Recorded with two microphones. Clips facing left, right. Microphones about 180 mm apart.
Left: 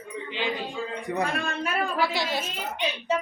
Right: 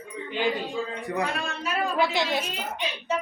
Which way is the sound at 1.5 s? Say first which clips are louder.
Left 1 dB; 55° left (ahead or behind).